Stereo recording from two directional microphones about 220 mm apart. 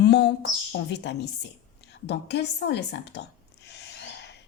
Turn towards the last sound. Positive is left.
turn(degrees=50)  # may be behind; listen again after turning